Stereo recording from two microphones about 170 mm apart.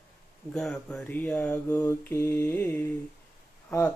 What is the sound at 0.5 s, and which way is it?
Mantra, 5° left (ahead or behind).